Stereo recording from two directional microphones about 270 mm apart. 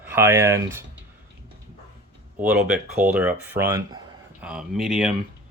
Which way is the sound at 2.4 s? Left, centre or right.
Centre.